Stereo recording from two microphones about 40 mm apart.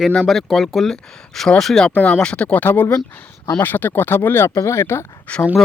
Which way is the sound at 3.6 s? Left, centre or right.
Left.